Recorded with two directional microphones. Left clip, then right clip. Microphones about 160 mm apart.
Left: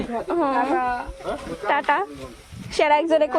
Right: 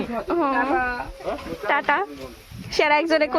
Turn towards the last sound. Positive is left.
turn(degrees=-20)  # may be behind; listen again after turning